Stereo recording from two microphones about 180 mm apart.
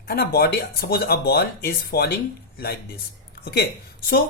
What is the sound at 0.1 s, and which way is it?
Speech, 55° left (ahead or behind).